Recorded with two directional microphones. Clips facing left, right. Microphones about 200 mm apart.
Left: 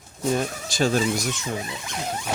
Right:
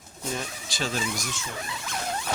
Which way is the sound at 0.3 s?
45° left (ahead or behind).